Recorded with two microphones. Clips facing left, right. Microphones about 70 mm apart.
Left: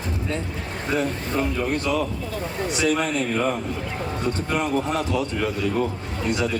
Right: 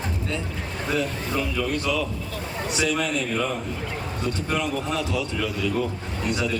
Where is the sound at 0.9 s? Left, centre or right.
Left.